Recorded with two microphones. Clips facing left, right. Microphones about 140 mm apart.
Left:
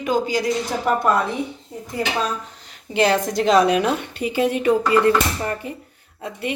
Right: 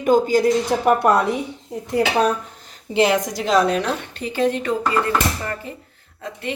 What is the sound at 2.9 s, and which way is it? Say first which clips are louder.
Speech: right 1 dB; 20° right (ahead or behind).